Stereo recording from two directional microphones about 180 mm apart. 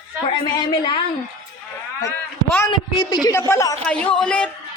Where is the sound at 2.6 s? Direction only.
20° left (ahead or behind).